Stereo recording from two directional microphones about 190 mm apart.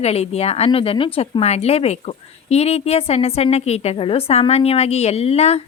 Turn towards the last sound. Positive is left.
turn(degrees=35)  # may be behind; listen again after turning